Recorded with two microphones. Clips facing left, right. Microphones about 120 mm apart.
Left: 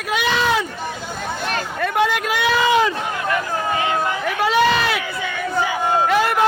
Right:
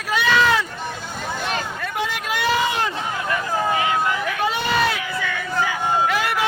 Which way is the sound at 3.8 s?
30° left (ahead or behind).